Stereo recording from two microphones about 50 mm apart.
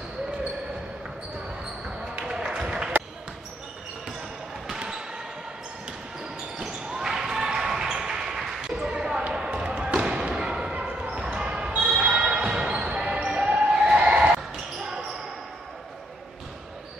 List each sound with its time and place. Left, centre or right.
2.2 s a sound: centre
4.6 s basketball bounce: centre
6.7 s basketball bounce: centre
8.8 s basketball bounce: centre